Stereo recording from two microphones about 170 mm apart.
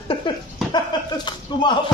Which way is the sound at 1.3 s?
25° left (ahead or behind).